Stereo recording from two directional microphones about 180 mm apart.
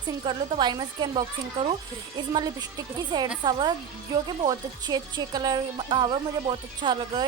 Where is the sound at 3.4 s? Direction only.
25° right (ahead or behind).